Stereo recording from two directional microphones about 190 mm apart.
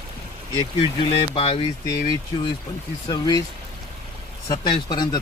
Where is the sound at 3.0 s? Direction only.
20° left (ahead or behind).